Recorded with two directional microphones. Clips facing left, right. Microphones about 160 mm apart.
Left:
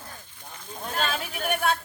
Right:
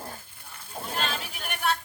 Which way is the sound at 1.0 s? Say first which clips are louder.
Left 4 dB; 50° left (ahead or behind).